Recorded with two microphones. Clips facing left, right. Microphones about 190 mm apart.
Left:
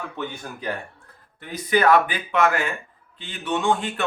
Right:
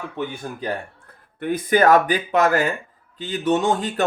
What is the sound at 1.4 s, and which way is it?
Speech, 55° right (ahead or behind).